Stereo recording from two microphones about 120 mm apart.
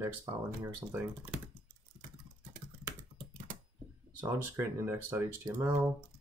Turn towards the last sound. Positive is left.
turn(degrees=-25)  # may be behind; listen again after turning